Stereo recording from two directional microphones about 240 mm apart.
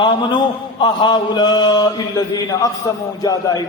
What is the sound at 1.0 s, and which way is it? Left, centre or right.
Speech, centre.